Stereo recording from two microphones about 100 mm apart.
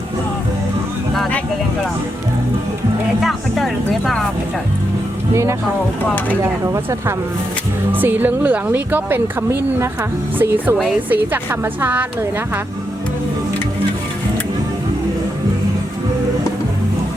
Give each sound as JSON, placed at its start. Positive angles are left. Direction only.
{"t": 3.2, "sound": "speech", "side_deg": 0}
{"t": 5.3, "sound": "speech", "side_deg": -30}
{"t": 7.9, "sound": "a woman's voice", "side_deg": -20}